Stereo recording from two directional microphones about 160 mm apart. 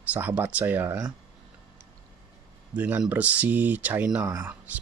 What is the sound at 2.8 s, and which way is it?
Speech, 10° right (ahead or behind).